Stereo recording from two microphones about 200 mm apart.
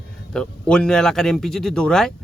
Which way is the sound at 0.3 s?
5° left (ahead or behind).